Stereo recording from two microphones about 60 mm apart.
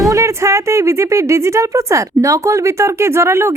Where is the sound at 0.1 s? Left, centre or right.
Right.